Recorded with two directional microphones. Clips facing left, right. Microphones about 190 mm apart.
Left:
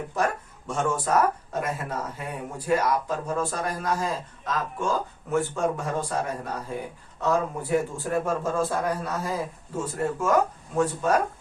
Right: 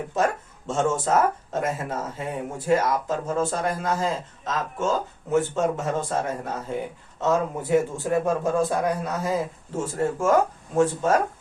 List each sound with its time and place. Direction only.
0.1 s speech: 20° right (ahead or behind)